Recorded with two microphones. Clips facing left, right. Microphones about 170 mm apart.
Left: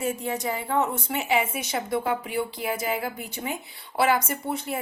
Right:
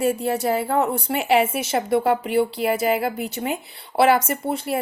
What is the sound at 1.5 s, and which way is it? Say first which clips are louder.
Speech: right 7 dB; 60° right (ahead or behind).